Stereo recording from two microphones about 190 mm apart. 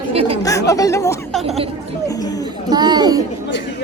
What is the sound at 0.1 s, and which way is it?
Chatter, 30° right (ahead or behind).